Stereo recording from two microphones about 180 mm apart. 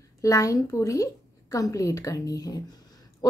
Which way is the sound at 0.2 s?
20° left (ahead or behind).